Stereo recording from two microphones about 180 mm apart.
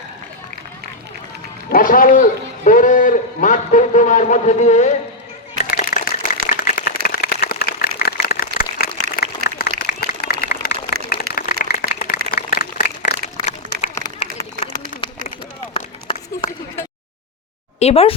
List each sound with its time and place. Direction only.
1.7 s a man's voice: 50° left (ahead or behind)
5.7 s a sound: 50° left (ahead or behind)
14.2 s run: 35° left (ahead or behind)
15.7 s run: 30° left (ahead or behind)
17.7 s speech: 35° left (ahead or behind)